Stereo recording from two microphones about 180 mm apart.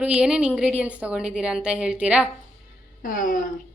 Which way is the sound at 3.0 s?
50° left (ahead or behind).